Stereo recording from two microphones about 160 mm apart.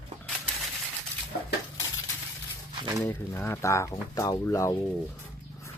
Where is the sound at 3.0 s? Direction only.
15° left (ahead or behind).